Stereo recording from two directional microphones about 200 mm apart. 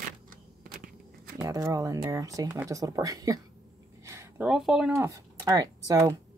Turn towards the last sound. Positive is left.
turn(degrees=-15)  # may be behind; listen again after turning